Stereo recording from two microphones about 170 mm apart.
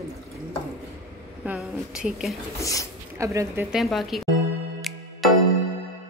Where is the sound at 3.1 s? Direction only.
20° right (ahead or behind).